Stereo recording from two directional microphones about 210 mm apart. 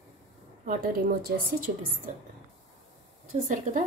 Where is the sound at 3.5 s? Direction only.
35° right (ahead or behind).